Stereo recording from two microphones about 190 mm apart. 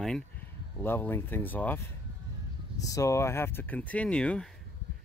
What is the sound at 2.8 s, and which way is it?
Speech, 15° left (ahead or behind).